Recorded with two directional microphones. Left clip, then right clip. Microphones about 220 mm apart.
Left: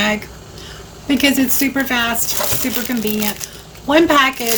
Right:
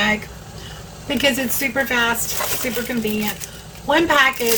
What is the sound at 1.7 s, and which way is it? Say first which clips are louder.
Speech: right 3 dB; 40° left (ahead or behind).